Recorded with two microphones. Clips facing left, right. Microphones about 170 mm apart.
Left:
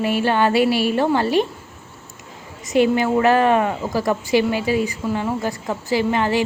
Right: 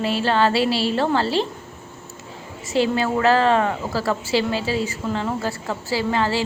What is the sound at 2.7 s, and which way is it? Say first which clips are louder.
A woman's voice: left 4 dB; 15° left (ahead or behind).